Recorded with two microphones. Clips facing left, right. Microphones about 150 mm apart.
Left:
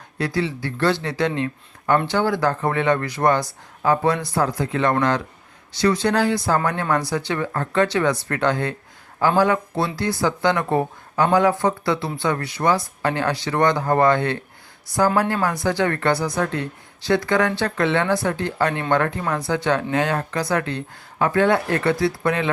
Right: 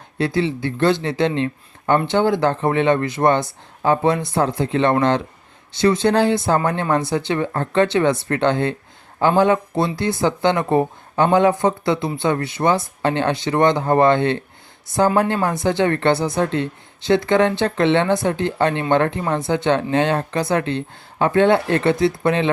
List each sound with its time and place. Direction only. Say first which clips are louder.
0.2 s speech: right 4 dB; 25° right (ahead or behind)